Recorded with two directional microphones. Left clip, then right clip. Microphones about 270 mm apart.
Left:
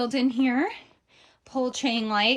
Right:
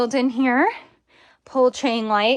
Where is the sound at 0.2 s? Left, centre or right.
Centre.